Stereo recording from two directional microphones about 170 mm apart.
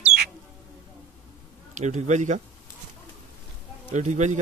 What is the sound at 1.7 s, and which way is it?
Speech, 45° right (ahead or behind).